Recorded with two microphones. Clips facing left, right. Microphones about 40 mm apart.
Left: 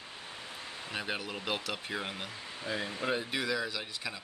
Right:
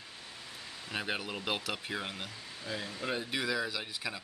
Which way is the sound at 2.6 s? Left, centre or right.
Left.